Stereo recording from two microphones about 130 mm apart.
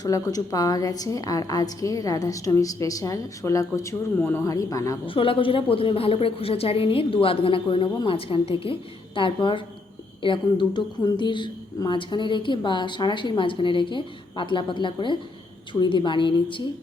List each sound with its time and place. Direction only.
0.0 s a woman's voice: 30° left (ahead or behind)
4.2 s speech: 15° left (ahead or behind)
4.4 s a woman's voice: 25° left (ahead or behind)
5.0 s a woman's voice: 45° left (ahead or behind)